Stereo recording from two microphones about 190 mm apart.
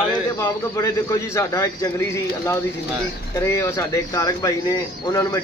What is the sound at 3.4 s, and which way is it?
Speech, 15° left (ahead or behind).